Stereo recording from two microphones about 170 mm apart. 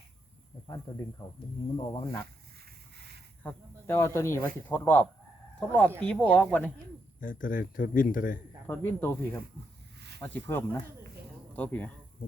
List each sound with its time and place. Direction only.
1.2 s speech: 20° left (ahead or behind)
2.9 s a sound: 75° right (ahead or behind)
3.4 s speech: 15° left (ahead or behind)
7.2 s speech: 50° left (ahead or behind)
8.6 s speech: 15° left (ahead or behind)